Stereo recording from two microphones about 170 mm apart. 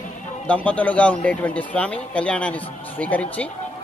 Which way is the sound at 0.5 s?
10° left (ahead or behind).